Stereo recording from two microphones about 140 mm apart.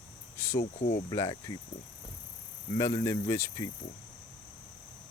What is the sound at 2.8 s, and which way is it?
Speech, 25° left (ahead or behind).